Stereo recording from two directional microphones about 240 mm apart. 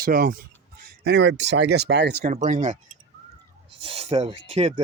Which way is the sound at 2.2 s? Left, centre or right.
Right.